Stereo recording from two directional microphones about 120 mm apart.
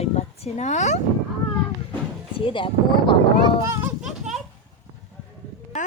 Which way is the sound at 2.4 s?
45° left (ahead or behind).